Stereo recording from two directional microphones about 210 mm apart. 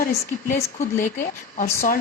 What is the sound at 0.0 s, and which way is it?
A woman's voice, 40° left (ahead or behind).